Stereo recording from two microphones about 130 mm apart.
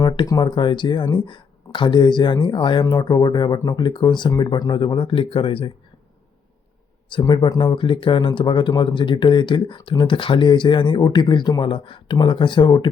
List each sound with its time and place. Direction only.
0.0 s speech: 30° left (ahead or behind)
7.1 s speech: 35° left (ahead or behind)